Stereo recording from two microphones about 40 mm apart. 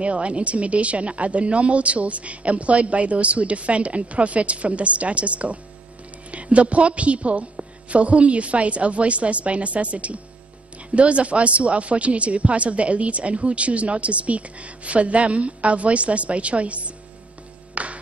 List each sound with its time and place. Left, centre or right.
0.0 s speech: right
17.8 s music: right